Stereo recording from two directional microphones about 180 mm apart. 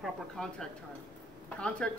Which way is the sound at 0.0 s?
5° left (ahead or behind).